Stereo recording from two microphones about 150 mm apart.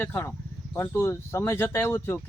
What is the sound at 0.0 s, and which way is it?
Speech, 15° left (ahead or behind).